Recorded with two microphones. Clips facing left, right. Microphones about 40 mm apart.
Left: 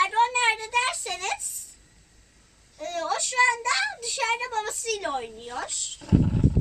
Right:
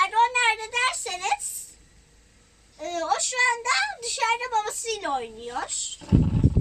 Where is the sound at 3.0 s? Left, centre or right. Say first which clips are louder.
Left 1 dB; centre.